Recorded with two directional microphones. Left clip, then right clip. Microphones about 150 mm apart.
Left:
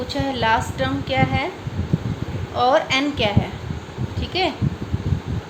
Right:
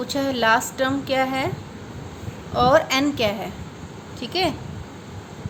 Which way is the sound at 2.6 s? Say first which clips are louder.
Even; 35° right (ahead or behind).